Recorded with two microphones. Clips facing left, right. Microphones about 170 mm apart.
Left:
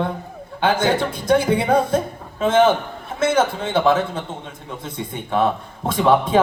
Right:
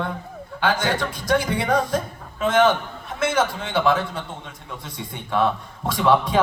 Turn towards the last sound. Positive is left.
turn(degrees=25)  # may be behind; listen again after turning